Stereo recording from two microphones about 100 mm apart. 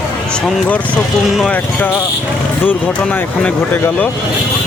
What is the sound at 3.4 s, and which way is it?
Speech, 10° left (ahead or behind).